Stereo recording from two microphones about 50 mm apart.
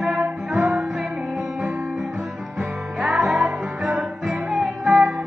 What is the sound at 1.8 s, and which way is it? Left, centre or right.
Guitar, centre.